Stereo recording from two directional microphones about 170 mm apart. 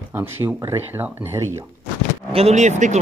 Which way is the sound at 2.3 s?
35° right (ahead or behind).